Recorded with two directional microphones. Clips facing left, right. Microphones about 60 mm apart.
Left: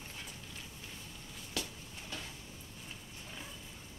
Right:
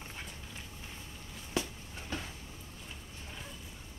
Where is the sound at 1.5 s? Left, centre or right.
Right.